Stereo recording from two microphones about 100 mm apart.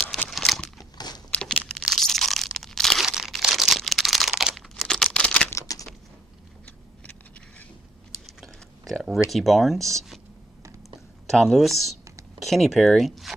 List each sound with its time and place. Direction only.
0.3 s crunch: centre (ahead or behind)
0.7 s crunch: 45° left (ahead or behind)
1.3 s crunch: 10° left (ahead or behind)
5.5 s a sound: 35° left (ahead or behind)
8.4 s a sound: centre (ahead or behind)
9.3 s speech: centre (ahead or behind)
11.2 s speech: 5° left (ahead or behind)